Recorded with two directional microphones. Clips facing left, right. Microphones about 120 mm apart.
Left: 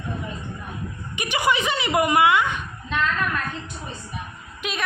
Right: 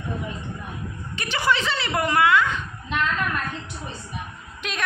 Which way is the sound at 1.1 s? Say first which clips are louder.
Left 1 dB; 15° left (ahead or behind).